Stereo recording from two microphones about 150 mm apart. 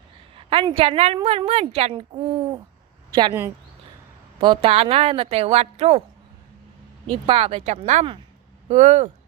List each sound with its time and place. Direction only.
0.3 s a woman's voice: 35° right (ahead or behind)
4.4 s a woman's voice: 30° right (ahead or behind)
7.1 s a woman's voice: 40° right (ahead or behind)